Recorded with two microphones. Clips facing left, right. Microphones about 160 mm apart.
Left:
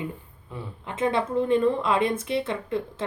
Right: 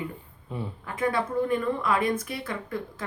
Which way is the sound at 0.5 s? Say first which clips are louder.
Right 3 dB; 20° right (ahead or behind).